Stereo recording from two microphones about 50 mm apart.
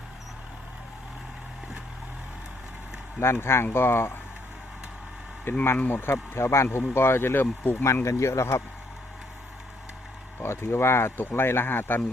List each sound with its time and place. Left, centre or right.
3.2 s speech: left
5.5 s speech: left
8.0 s speech: left
10.4 s speech: left